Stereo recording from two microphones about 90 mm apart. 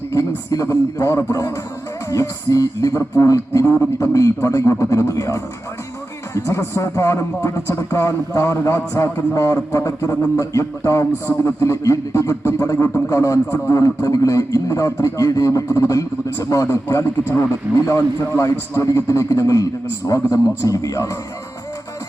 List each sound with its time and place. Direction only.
0.1 s a man's voice: 40° left (ahead or behind)